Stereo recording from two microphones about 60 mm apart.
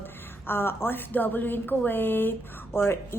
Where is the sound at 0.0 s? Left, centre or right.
Left.